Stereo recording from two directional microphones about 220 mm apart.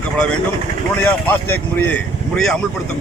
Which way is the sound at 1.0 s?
10° left (ahead or behind).